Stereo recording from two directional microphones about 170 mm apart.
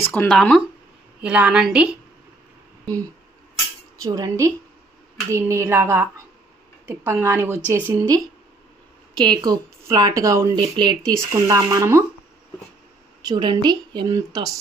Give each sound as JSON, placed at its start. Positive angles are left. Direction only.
{"t": 0.0, "sound": "a woman's voice", "side_deg": 10}
{"t": 2.8, "sound": "speech", "side_deg": -20}
{"t": 9.1, "sound": "speech", "side_deg": -25}
{"t": 13.2, "sound": "speech", "side_deg": -25}